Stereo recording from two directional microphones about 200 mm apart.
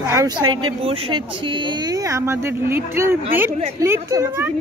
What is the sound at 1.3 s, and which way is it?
Speech, 25° right (ahead or behind).